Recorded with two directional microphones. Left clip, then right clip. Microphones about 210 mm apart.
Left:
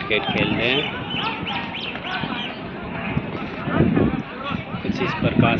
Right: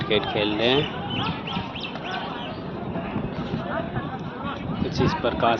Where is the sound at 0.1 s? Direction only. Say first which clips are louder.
Left 2 dB; 15° right (ahead or behind).